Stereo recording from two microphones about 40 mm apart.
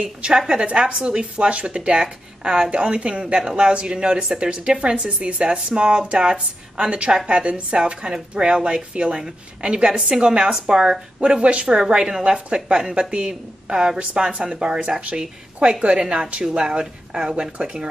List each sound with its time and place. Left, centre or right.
0.0 s speech: right
12.2 s speech: right
14.3 s speech: right